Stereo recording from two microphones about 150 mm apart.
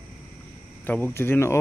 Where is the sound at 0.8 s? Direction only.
15° left (ahead or behind).